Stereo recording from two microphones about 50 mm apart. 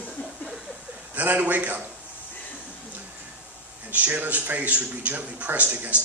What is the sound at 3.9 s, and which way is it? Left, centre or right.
Speech, right.